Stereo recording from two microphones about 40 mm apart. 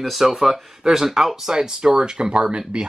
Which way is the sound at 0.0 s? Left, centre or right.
Centre.